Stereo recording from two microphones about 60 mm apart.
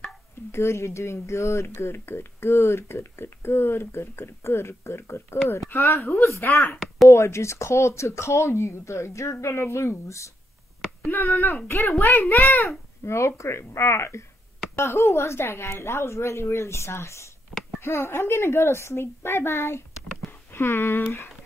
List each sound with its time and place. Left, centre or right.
0.5 s speech: left
7.1 s speech: left
11.1 s speech: left
13.0 s speech: left